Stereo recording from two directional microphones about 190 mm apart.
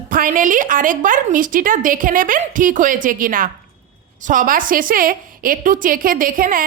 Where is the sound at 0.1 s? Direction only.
45° right (ahead or behind).